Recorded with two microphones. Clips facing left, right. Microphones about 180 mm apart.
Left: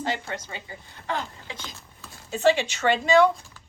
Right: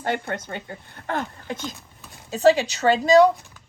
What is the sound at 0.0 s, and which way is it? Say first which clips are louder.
A woman's voice: right 3 dB; 55° right (ahead or behind).